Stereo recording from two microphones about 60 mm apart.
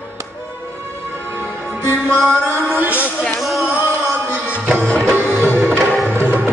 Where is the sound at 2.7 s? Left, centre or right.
Right.